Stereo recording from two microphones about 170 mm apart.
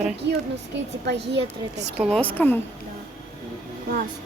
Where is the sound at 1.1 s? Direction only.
90° right.